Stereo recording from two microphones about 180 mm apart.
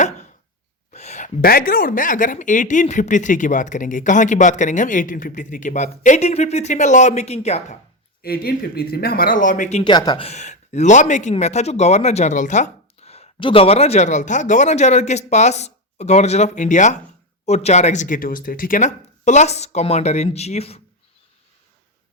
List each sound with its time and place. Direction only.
0.9 s a woman's voice: 40° left (ahead or behind)
8.2 s speech: 60° left (ahead or behind); by 9.9 s 35° left (ahead or behind)
9.9 s speech: 25° left (ahead or behind)
10.2 s a man's voice: 40° left (ahead or behind)